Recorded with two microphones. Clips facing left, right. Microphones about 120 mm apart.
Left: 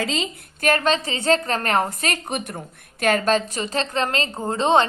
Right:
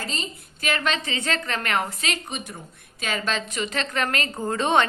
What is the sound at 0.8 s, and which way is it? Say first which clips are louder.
A woman's voice: left 5 dB; 35° left (ahead or behind).